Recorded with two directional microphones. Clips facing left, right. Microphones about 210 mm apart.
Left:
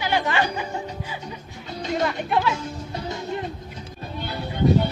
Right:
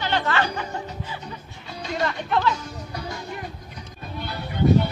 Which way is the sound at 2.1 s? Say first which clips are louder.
Even; 15° left (ahead or behind).